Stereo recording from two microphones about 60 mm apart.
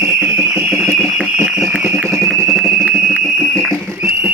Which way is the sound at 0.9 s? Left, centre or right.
Centre.